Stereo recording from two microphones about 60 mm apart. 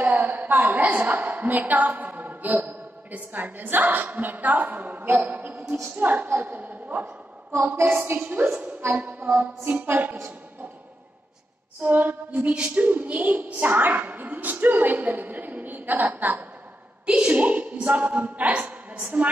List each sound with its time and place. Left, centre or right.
0.0 s a woman's voice: right
7.5 s a woman's voice: right
7.9 s a woman's voice: right
11.8 s a woman's voice: right
17.0 s a woman's voice: centre